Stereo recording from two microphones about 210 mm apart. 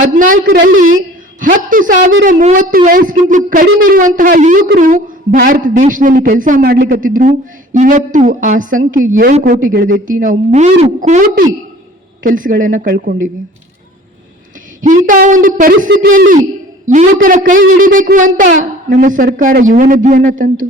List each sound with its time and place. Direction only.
0.0 s speech: 40° right (ahead or behind)
1.4 s speech: 40° right (ahead or behind)
14.8 s speech: 40° right (ahead or behind)